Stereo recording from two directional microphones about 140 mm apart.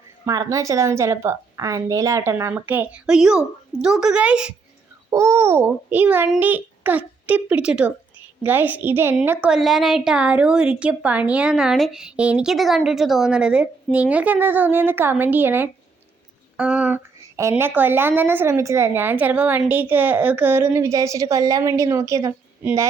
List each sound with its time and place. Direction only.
0.3 s a woman's voice: 25° right (ahead or behind); by 4.5 s 5° right (ahead or behind)
5.1 s a woman's voice: 20° right (ahead or behind)
9.5 s a woman's voice: centre (ahead or behind); by 22.4 s 20° right (ahead or behind)